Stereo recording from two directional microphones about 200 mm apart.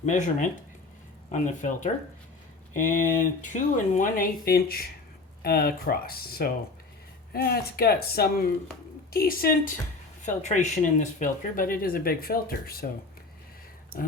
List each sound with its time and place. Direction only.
0.0 s speech: 35° left (ahead or behind)
3.4 s speech: 40° left (ahead or behind)
13.9 s speech: 45° left (ahead or behind)